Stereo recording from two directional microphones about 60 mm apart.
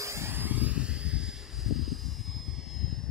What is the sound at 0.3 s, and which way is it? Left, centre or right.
Vehicle, right.